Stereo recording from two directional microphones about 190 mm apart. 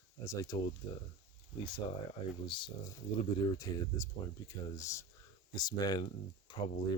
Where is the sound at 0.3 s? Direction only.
20° left (ahead or behind).